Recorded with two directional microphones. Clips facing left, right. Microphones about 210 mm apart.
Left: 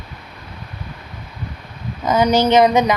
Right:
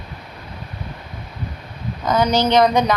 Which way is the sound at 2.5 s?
5° left (ahead or behind).